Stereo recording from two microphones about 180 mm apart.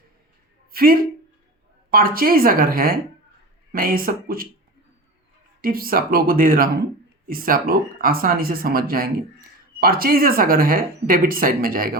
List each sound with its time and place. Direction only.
0.7 s speech: 55° right (ahead or behind)
5.6 s speech: 55° right (ahead or behind)